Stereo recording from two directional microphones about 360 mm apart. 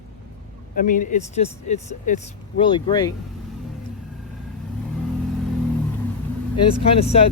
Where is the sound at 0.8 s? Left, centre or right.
Left.